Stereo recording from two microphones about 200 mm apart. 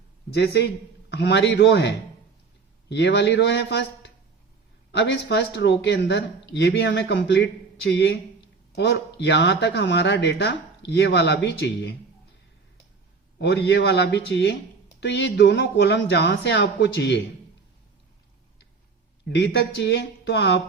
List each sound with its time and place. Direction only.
0.3 s speech: 55° left (ahead or behind)
2.9 s speech: 60° left (ahead or behind)
13.7 s speech: 60° left (ahead or behind)
19.4 s speech: 60° left (ahead or behind)